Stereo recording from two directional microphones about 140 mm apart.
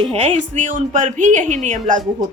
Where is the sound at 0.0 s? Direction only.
50° right (ahead or behind).